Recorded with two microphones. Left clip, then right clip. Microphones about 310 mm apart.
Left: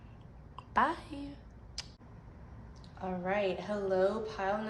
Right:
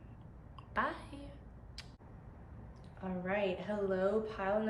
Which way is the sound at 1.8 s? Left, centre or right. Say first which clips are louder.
Left 8 dB; centre.